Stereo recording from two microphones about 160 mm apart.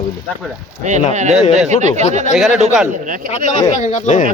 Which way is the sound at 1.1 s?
45° right (ahead or behind).